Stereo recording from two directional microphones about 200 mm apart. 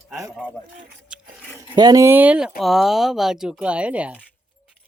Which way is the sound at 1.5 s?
20° right (ahead or behind).